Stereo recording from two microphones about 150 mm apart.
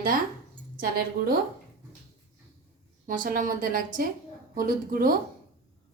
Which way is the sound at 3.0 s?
65° right (ahead or behind).